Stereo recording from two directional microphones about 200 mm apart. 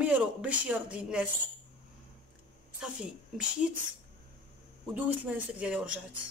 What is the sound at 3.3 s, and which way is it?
Speech, centre (ahead or behind).